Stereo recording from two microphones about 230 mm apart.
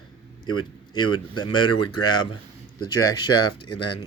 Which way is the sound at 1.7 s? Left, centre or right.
Left.